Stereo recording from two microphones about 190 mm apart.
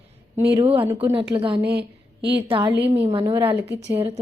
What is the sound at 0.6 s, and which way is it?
Speech, 30° right (ahead or behind).